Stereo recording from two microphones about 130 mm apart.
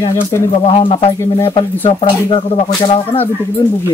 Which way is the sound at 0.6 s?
45° left (ahead or behind).